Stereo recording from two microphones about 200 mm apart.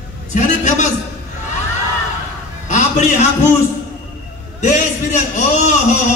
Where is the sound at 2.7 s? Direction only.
35° left (ahead or behind).